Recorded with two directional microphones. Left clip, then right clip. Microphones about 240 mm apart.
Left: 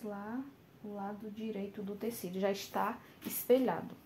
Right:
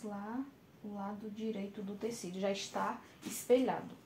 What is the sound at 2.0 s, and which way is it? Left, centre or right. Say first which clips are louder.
Speech: left 1 dB; left.